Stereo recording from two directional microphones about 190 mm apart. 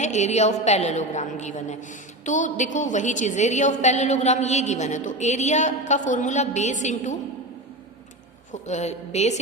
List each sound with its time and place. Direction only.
0.0 s a woman's voice: 40° left (ahead or behind)
8.5 s a woman's voice: 40° left (ahead or behind)